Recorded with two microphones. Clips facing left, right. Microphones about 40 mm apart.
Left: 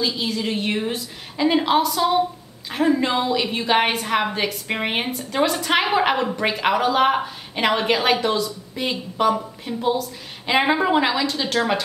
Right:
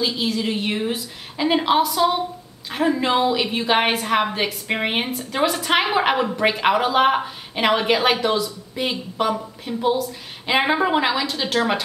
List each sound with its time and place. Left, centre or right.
0.0 s a woman's voice: centre